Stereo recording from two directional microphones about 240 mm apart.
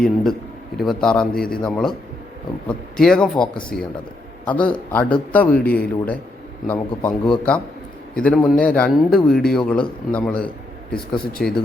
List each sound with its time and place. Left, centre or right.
0.0 s a man's voice: centre
3.0 s a man's voice: centre
3.7 s speech: left
4.4 s a man's voice: centre